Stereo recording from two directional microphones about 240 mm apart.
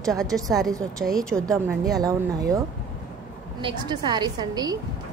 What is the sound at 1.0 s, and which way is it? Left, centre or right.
Speech, centre.